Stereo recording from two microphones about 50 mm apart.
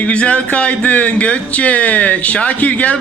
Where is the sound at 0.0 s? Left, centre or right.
Left.